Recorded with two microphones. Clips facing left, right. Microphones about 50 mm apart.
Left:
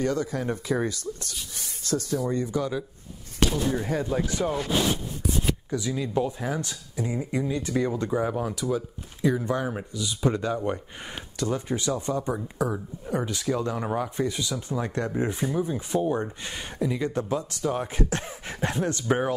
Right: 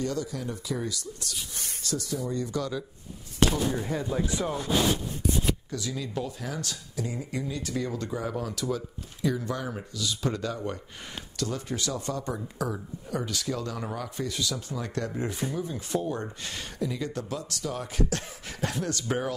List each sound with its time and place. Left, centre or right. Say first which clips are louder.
0.0 s speech: left 5 dB; left
2.2 s speech: left 4 dB; left
3.8 s speech: left 3 dB; left
4.2 s speech: left 3 dB; left
5.7 s speech: left 5 dB; centre